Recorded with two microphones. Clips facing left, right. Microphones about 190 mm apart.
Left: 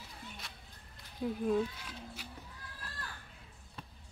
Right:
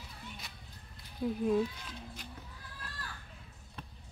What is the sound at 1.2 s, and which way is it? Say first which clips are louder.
Speech: right 2 dB; 5° left (ahead or behind).